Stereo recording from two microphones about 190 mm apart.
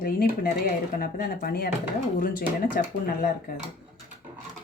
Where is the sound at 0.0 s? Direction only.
50° left (ahead or behind).